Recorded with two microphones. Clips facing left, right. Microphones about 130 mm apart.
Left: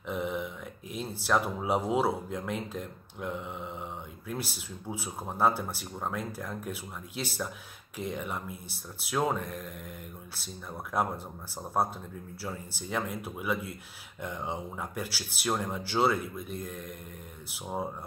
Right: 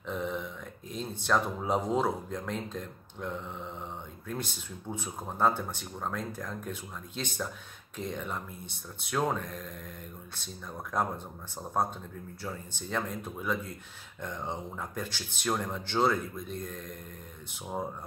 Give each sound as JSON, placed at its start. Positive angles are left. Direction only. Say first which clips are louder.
{"t": 0.0, "sound": "speech", "louder": "left 1 dB", "side_deg": 10}